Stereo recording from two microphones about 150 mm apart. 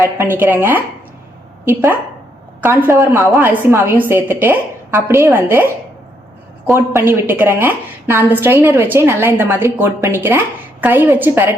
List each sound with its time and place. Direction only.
0.0 s a woman's voice: 15° right (ahead or behind)
6.7 s a woman's voice: 15° right (ahead or behind)